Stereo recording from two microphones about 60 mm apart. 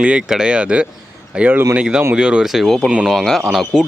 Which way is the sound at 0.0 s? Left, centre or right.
Centre.